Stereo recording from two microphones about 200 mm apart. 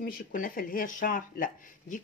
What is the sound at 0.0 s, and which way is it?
Speech, 45° left (ahead or behind).